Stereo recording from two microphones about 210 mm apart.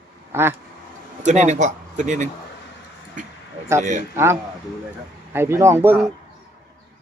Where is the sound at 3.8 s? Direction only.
35° right (ahead or behind).